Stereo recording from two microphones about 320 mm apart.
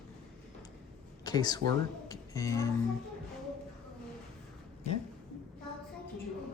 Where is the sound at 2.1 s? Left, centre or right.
Centre.